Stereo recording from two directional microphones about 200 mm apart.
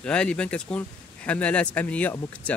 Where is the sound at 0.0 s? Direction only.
5° left (ahead or behind).